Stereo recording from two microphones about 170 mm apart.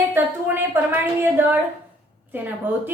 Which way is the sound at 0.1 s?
10° right (ahead or behind).